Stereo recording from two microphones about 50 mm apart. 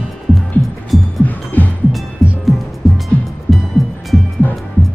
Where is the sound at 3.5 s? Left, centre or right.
Centre.